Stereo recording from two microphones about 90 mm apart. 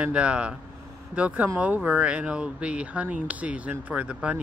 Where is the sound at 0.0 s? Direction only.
10° right (ahead or behind).